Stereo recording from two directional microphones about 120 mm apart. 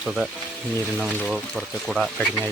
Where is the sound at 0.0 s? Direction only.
5° right (ahead or behind).